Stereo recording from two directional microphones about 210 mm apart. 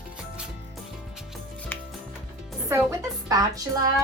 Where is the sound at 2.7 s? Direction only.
15° right (ahead or behind).